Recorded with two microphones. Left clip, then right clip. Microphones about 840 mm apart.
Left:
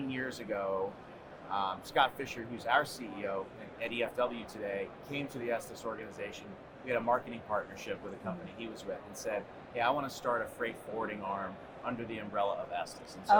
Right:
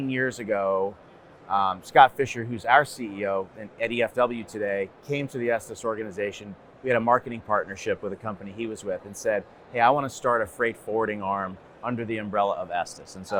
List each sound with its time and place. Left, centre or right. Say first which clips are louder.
0.1 s speech: right 13 dB; right